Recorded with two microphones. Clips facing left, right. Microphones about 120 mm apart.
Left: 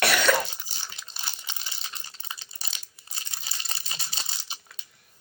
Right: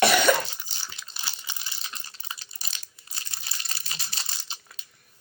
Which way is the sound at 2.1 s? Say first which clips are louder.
Even; 25° left (ahead or behind).